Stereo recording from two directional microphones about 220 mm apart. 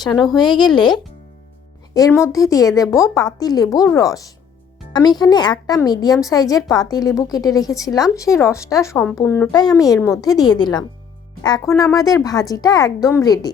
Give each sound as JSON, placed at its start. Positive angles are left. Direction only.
{"t": 0.0, "sound": "a woman's voice", "side_deg": 20}